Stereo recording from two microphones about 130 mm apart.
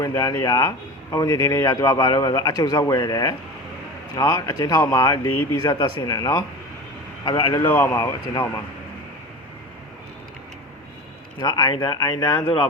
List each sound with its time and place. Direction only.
0.0 s a man's voice: 30° left (ahead or behind)
7.5 s a man's voice: 15° left (ahead or behind)
11.3 s speech: 30° left (ahead or behind)